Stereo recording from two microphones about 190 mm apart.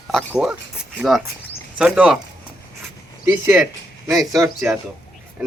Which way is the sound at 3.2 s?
15° right (ahead or behind).